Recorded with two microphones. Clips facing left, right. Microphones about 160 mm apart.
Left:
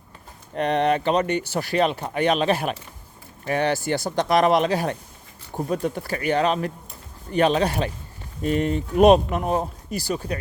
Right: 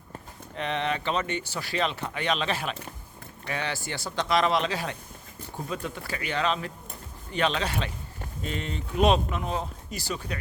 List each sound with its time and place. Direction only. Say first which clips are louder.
0.5 s speech: left 8 dB; 50° left (ahead or behind)